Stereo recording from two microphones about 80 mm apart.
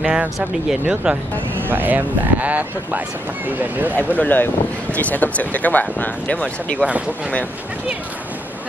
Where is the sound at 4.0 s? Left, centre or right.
Left.